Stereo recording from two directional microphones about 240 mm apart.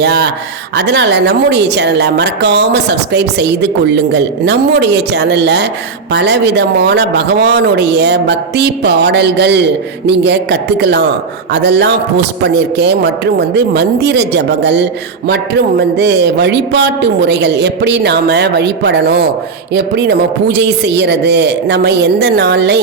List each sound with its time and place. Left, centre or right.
0.0 s a woman's voice: right